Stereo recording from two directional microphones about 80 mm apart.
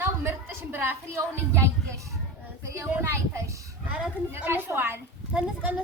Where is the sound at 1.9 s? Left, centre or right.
Right.